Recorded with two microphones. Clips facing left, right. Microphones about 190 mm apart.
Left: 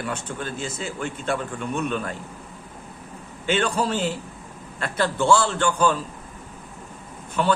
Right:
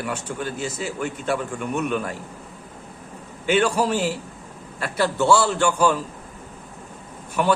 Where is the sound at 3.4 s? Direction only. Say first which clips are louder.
Right 3 dB; 10° right (ahead or behind).